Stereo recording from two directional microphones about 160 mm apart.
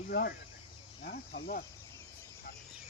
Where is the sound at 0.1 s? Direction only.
75° left (ahead or behind).